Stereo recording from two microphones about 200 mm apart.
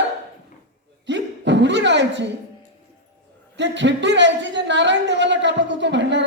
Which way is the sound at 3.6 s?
60° right (ahead or behind).